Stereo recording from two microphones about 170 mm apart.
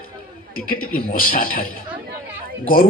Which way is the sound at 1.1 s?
55° left (ahead or behind).